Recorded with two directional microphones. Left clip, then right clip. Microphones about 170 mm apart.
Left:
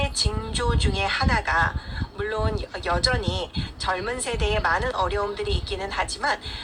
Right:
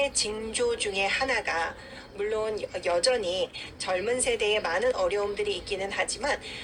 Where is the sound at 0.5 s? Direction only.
15° right (ahead or behind).